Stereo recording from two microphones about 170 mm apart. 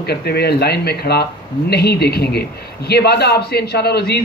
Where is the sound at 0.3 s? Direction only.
70° left (ahead or behind).